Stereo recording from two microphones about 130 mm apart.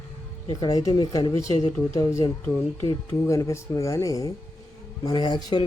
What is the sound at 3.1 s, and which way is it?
Speech, 25° left (ahead or behind).